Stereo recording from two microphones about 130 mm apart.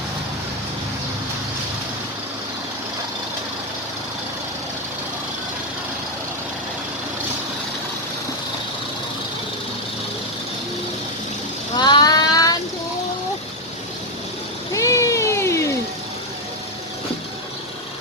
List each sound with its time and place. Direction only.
11.8 s child singing: 35° left (ahead or behind)
14.7 s cat: 25° left (ahead or behind)